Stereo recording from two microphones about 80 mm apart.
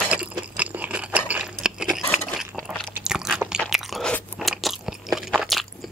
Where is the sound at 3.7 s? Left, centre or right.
Centre.